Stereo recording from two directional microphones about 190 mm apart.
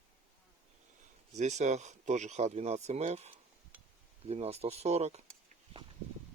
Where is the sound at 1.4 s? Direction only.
40° right (ahead or behind).